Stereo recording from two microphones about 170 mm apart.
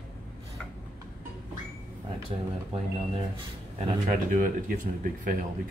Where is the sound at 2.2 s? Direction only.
35° right (ahead or behind).